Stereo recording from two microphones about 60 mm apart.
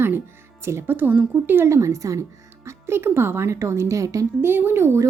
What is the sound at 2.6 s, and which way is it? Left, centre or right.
Speech, right.